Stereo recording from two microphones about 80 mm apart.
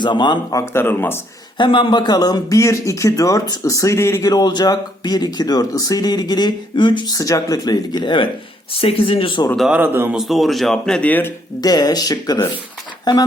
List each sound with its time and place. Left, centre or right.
0.0 s speech: left
0.5 s speech: left
1.5 s speech: left
2.1 s speech: left
2.6 s speech: left
4.2 s speech: left
7.1 s speech: left
9.0 s speech: left
9.8 s a man's voice: right
10.1 s speech: centre
11.0 s speech: left
11.6 s speech: left